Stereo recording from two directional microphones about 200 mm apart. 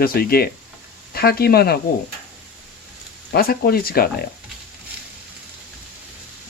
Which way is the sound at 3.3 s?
50° left (ahead or behind).